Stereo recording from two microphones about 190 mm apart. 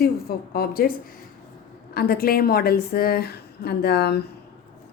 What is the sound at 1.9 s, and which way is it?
A woman's voice, 50° left (ahead or behind).